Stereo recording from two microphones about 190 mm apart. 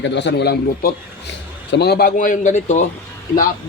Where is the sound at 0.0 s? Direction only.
70° left (ahead or behind); by 2.8 s 40° left (ahead or behind).